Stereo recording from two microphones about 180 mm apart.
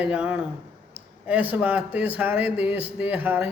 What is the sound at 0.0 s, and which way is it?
Speech, 5° right (ahead or behind).